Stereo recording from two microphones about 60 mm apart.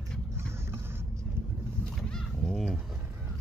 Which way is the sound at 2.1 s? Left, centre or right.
Centre.